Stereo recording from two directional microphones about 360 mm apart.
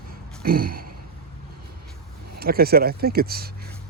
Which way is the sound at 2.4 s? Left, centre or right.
Right.